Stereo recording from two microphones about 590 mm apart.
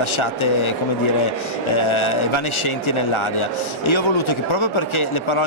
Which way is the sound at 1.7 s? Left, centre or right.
Left.